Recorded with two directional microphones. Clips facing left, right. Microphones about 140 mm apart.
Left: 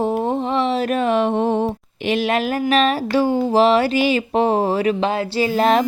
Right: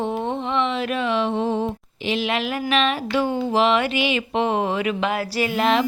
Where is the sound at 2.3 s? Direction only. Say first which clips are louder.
Left 5 dB; 40° left (ahead or behind).